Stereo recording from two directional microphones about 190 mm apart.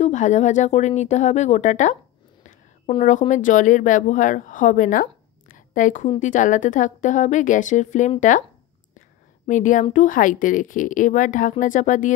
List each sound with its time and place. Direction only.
0.0 s speech: 40° left (ahead or behind)
9.5 s a woman's voice: 40° left (ahead or behind)